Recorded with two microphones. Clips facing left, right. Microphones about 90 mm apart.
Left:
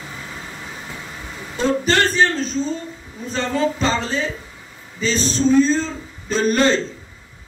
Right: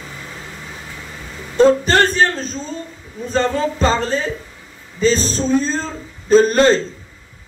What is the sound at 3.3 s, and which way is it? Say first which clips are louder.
Music: right 3 dB; 40° right (ahead or behind).